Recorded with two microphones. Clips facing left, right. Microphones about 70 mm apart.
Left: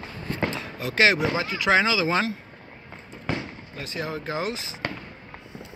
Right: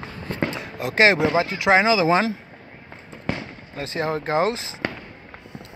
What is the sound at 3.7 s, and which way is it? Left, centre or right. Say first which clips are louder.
Speech: right 7 dB; right.